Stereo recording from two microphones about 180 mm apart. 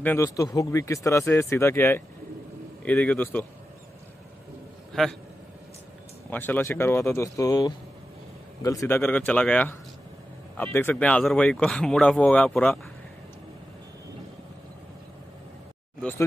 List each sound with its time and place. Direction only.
0.0 s speech: 15° left (ahead or behind)
4.9 s speech: 5° left (ahead or behind)
6.3 s speech: 10° left (ahead or behind)
16.0 s a sound: 10° left (ahead or behind)